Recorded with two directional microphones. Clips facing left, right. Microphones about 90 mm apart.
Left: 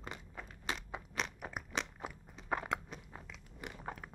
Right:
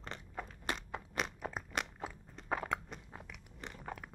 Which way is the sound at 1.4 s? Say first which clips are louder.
Right 2 dB; 10° left (ahead or behind).